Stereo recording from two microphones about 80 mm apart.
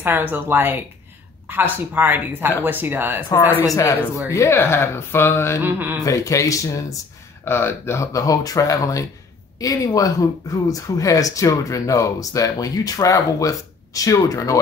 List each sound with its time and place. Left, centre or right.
0.0 s speech: right
3.6 s speech: left
4.3 s speech: left
5.6 s speech: right
6.0 s speech: left
7.4 s speech: left